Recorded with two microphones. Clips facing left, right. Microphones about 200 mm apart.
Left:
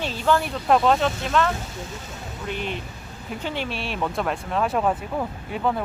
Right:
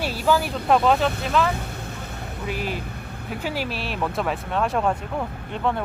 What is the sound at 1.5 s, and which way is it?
Vehicle, 60° right (ahead or behind).